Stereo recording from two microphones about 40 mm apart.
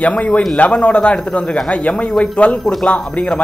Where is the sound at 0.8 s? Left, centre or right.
Left.